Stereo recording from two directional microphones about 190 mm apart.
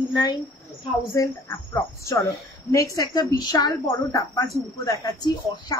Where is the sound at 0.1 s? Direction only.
20° left (ahead or behind).